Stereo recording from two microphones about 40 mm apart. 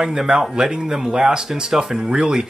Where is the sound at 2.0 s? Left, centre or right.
Right.